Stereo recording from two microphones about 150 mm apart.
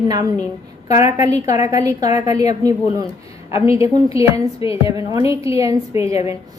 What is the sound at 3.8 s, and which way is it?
A woman's voice, 20° right (ahead or behind).